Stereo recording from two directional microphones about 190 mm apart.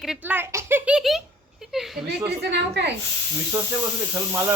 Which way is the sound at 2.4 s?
65° right (ahead or behind).